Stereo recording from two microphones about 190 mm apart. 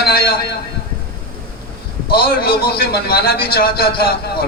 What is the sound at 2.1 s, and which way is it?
A man's voice, 55° left (ahead or behind).